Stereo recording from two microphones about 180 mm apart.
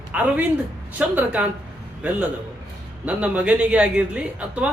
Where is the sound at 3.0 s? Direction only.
5° right (ahead or behind).